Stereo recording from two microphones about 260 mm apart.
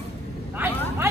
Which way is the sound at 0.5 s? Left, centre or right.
Centre.